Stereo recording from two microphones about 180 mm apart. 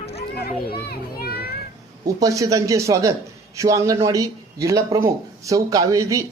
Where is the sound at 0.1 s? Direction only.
60° left (ahead or behind).